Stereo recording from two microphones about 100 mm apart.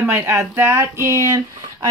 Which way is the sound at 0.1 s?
20° right (ahead or behind).